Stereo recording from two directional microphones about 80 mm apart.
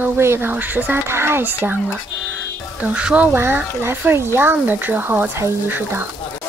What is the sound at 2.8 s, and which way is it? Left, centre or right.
Speech, centre.